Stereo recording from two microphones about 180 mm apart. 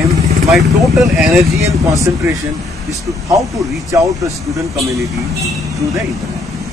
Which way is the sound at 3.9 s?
15° right (ahead or behind).